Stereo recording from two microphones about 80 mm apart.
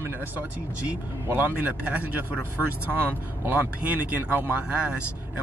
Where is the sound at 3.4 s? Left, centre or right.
Right.